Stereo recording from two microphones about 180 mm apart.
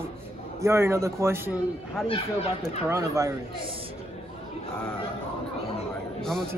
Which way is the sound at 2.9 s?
15° right (ahead or behind).